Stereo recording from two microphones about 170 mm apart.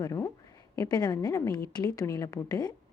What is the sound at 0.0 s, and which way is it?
A woman's voice, 20° left (ahead or behind).